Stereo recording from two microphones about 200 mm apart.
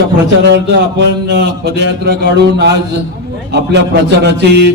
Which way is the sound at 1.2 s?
55° right (ahead or behind).